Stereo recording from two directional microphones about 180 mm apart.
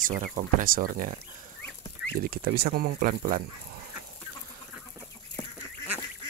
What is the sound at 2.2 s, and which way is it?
Speech, 55° right (ahead or behind).